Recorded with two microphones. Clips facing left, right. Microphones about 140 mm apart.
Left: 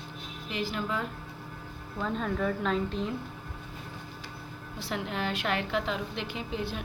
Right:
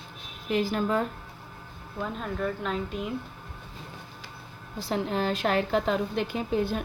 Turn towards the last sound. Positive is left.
turn(degrees=-45)  # may be behind; listen again after turning